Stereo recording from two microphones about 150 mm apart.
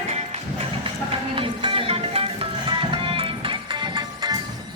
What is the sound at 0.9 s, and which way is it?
Music, 35° right (ahead or behind).